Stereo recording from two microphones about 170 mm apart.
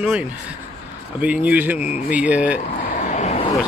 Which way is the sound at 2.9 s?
45° left (ahead or behind).